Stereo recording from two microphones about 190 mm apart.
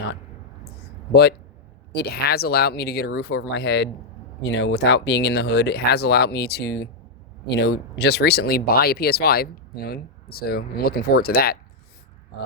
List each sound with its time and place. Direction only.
1.9 s speech: 55° left (ahead or behind)